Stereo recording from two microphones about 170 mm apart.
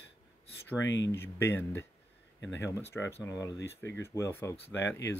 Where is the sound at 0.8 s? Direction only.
90° left.